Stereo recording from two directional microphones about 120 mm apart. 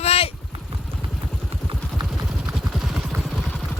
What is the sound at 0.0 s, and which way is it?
Vehicle, 55° left (ahead or behind).